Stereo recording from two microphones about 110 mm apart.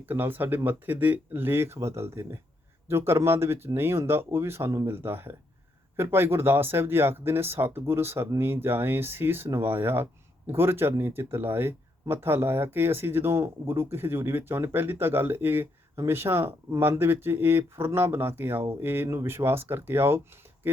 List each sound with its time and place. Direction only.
0.0 s speech: 20° right (ahead or behind)